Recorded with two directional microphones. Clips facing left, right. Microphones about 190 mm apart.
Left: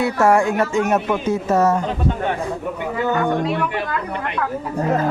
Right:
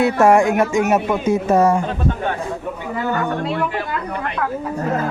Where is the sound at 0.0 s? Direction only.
15° right (ahead or behind).